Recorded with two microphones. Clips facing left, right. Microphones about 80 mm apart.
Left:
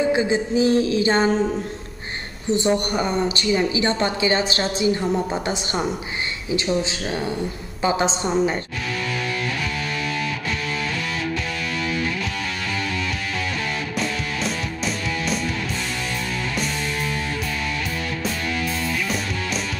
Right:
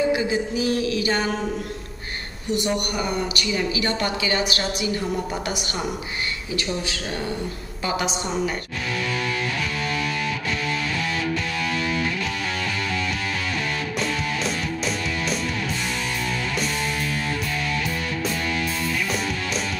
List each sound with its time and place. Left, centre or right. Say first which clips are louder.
0.1 s speech: left 3 dB; left
2.5 s speech: left 4 dB; left